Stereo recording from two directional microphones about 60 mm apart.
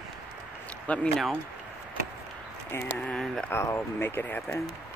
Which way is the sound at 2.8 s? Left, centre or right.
Centre.